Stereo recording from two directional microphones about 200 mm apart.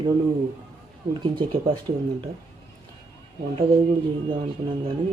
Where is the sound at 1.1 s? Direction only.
25° right (ahead or behind).